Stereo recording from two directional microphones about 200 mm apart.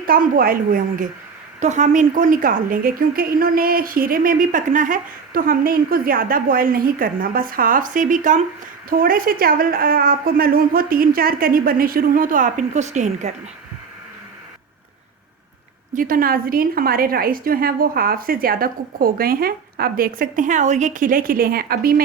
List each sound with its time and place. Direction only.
0.0 s a woman's voice: 45° right (ahead or behind)
15.9 s a woman's voice: 45° right (ahead or behind)